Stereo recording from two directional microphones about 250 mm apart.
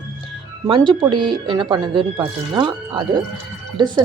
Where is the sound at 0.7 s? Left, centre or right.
Centre.